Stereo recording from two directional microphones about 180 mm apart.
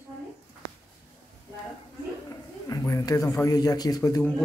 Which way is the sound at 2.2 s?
20° left (ahead or behind).